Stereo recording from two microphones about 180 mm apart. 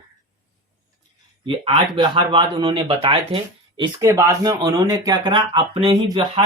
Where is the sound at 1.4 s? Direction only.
30° right (ahead or behind).